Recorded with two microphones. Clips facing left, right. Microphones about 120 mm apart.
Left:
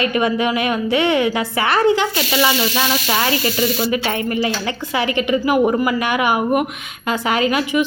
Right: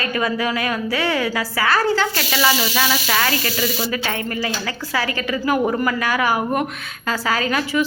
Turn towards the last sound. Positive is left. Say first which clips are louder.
# left 3 dB
turn(degrees=15)  # may be behind; listen again after turning